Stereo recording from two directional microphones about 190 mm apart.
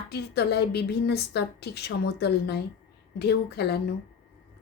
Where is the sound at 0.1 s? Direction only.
60° left (ahead or behind).